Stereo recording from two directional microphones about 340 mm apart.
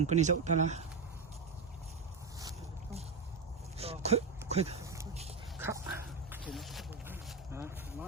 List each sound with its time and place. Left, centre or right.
0.0 s speech: centre
2.4 s boat: centre
3.8 s a sound: centre
5.5 s dog: centre